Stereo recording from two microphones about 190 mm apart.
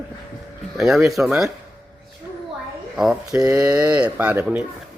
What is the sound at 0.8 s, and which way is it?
Speech, centre (ahead or behind).